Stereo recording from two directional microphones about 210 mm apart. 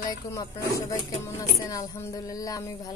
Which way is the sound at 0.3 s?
15° left (ahead or behind).